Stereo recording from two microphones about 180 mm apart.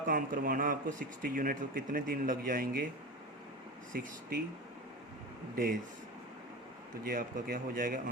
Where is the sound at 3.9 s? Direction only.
55° right (ahead or behind).